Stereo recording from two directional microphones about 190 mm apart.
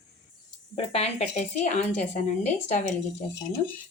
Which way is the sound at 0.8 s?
30° left (ahead or behind).